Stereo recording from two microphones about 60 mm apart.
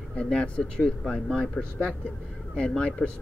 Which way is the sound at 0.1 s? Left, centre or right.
Centre.